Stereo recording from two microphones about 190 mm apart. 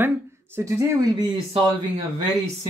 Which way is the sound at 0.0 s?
10° right (ahead or behind).